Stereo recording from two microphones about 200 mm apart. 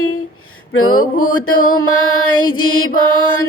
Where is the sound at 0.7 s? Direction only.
90° left.